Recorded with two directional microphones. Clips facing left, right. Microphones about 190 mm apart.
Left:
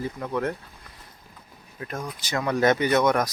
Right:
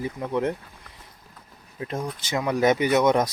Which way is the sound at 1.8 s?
25° right (ahead or behind).